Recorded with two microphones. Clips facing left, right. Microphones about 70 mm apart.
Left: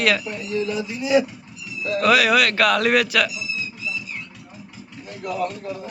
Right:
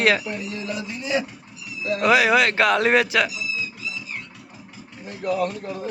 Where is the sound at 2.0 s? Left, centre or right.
Right.